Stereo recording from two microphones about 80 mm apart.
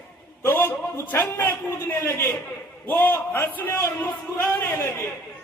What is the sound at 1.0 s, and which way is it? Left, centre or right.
A man's voice, left.